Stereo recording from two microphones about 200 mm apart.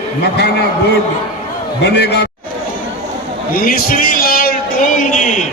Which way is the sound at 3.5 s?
45° left (ahead or behind).